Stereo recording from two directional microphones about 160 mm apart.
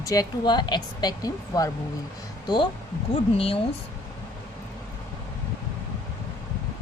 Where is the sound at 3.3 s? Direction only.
35° left (ahead or behind).